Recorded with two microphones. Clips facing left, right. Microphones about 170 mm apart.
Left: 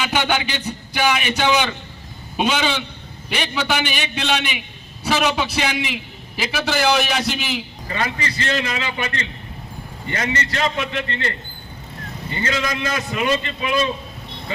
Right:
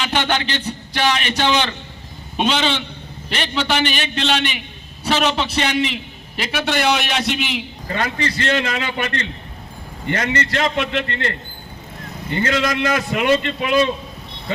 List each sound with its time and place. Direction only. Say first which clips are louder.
0.0 s a man's voice: even; 10° left (ahead or behind)
7.9 s a man's voice: right 2 dB; 55° right (ahead or behind)
10.1 s a man's voice: right 3 dB; 55° right (ahead or behind)
12.3 s a man's voice: right 4 dB; 55° right (ahead or behind)